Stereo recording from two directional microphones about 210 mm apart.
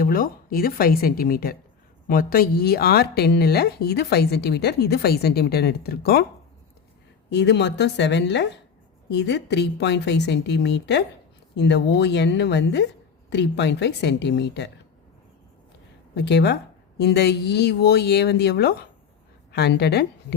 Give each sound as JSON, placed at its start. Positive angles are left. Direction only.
{"t": 0.0, "sound": "speech", "side_deg": 45}
{"t": 7.3, "sound": "a woman's voice", "side_deg": 55}
{"t": 16.1, "sound": "speech", "side_deg": 55}